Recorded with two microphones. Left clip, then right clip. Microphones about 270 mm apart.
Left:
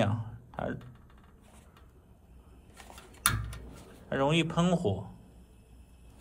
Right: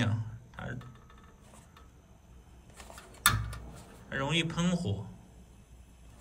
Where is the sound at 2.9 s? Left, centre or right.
Centre.